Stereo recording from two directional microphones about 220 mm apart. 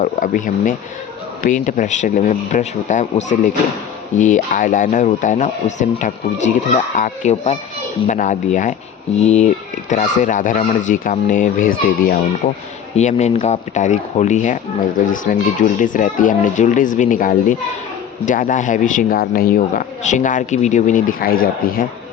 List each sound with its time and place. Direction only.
0.0 s speech: 35° left (ahead or behind)